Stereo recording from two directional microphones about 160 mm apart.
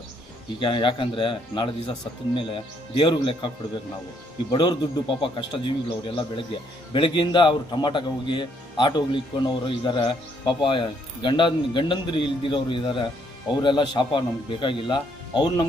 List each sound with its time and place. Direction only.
0.6 s a man's voice: 30° left (ahead or behind)
4.5 s a man's voice: 25° left (ahead or behind)